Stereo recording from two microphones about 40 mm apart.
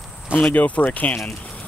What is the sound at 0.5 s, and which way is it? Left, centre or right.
Speech, left.